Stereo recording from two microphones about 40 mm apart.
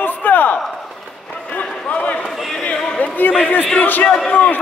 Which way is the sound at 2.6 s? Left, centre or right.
Left.